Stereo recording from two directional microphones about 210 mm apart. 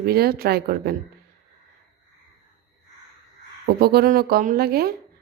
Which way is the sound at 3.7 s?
50° right (ahead or behind).